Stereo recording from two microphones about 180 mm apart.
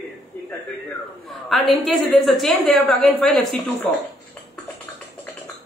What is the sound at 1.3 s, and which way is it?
A woman's voice, centre (ahead or behind).